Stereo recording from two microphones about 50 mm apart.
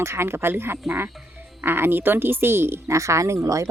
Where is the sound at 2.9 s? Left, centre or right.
Right.